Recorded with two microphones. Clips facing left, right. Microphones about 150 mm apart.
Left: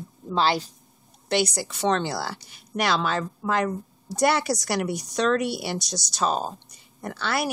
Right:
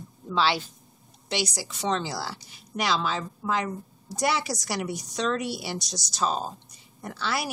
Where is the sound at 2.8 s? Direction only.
60° left (ahead or behind).